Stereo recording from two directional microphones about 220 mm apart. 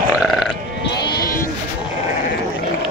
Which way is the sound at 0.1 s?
5° right (ahead or behind).